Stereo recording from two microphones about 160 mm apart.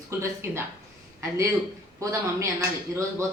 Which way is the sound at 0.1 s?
15° right (ahead or behind).